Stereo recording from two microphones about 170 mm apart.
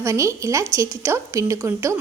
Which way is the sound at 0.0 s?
15° right (ahead or behind).